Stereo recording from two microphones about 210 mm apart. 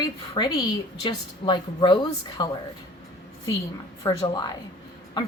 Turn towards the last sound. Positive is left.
turn(degrees=20)  # may be behind; listen again after turning